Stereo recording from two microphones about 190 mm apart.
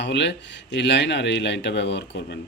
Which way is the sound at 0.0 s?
65° left (ahead or behind).